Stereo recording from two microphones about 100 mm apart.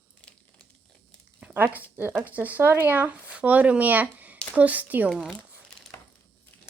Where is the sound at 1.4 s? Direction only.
15° right (ahead or behind).